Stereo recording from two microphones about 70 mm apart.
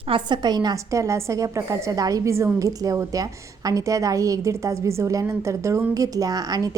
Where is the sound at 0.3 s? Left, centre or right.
Right.